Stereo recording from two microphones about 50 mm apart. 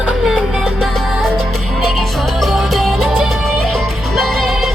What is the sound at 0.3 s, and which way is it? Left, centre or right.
Music, centre.